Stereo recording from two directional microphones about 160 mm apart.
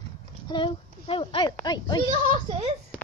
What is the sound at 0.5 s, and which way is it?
Speech, 30° left (ahead or behind).